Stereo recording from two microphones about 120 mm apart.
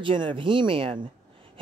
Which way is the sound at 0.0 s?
45° right (ahead or behind).